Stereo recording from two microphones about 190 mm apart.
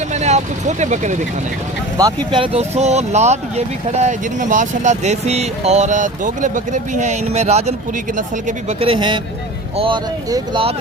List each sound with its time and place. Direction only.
0.1 s speech: 35° right (ahead or behind)
2.0 s speech: 20° right (ahead or behind)